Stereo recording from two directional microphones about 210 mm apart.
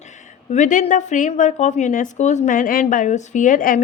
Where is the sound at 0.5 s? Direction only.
35° left (ahead or behind).